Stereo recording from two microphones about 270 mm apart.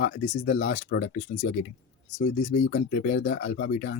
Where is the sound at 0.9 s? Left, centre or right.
Left.